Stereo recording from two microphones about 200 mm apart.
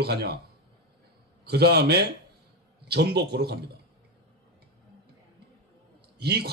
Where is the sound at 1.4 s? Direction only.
55° right (ahead or behind).